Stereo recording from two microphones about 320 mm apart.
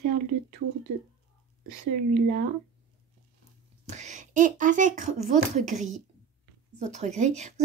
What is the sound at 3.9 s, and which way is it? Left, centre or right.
Speech, right.